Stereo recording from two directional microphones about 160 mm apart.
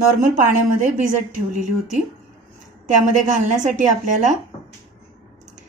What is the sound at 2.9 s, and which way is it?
A woman's voice, 50° right (ahead or behind).